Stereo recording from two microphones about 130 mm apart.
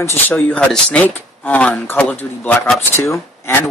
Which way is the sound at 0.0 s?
20° left (ahead or behind).